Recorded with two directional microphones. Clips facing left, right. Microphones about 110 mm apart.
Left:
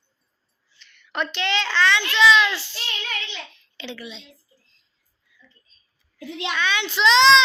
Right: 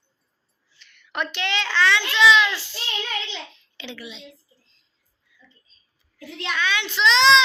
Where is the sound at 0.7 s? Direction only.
10° right (ahead or behind).